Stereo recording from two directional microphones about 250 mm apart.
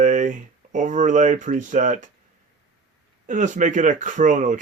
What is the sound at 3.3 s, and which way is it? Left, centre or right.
Speech, right.